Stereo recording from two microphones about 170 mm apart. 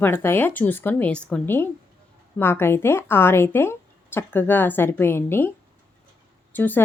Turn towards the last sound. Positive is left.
turn(degrees=10)  # may be behind; listen again after turning